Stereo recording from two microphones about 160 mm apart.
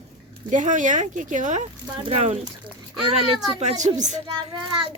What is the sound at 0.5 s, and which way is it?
Speech, 50° right (ahead or behind).